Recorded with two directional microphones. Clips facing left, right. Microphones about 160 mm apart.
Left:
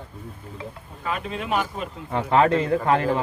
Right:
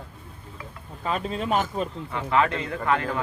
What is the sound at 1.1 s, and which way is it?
Speech, 35° right (ahead or behind).